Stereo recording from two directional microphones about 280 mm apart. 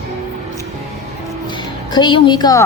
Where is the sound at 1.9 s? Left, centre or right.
Centre.